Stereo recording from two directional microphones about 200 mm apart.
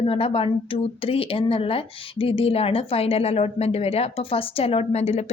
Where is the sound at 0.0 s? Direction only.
30° left (ahead or behind).